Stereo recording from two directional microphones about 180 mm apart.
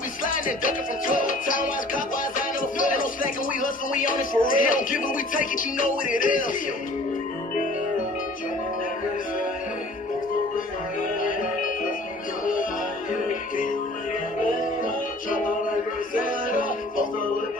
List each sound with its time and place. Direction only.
0.3 s music: 50° left (ahead or behind)
11.2 s music: 50° left (ahead or behind)
15.3 s music: 50° left (ahead or behind)